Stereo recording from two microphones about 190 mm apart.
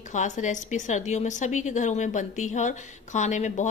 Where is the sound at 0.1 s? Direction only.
40° left (ahead or behind).